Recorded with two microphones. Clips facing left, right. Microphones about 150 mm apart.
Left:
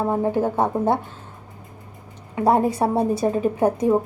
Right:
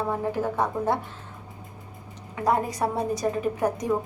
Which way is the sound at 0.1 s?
30° left (ahead or behind).